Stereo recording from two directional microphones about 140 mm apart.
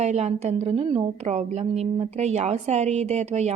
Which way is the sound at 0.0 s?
50° right (ahead or behind).